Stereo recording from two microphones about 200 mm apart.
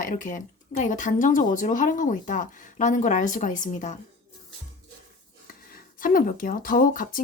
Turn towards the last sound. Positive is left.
turn(degrees=45)  # may be behind; listen again after turning